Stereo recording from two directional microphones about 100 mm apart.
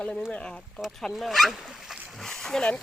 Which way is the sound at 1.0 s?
Centre (ahead or behind).